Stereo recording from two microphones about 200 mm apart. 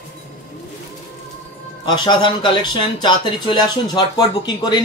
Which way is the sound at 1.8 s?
20° left (ahead or behind).